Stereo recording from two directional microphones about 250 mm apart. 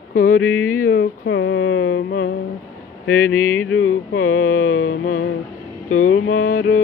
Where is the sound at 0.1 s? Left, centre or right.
Left.